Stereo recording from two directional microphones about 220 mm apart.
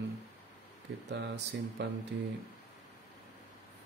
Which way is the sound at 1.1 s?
55° right (ahead or behind).